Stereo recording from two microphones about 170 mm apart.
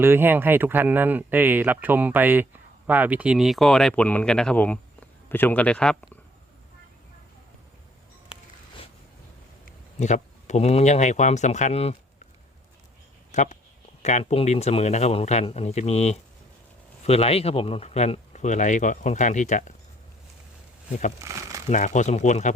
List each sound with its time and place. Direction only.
0.0 s speech: 15° right (ahead or behind); by 6.1 s 5° left (ahead or behind)
10.0 s speech: 45° left (ahead or behind)
13.3 s speech: 45° left (ahead or behind)
21.2 s speech: 20° right (ahead or behind)
21.7 s speech: 45° left (ahead or behind)